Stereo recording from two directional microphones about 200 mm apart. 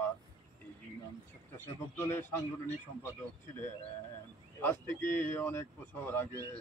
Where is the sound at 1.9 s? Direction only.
15° left (ahead or behind).